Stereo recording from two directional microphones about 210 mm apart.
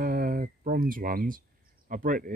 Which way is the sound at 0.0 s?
45° right (ahead or behind).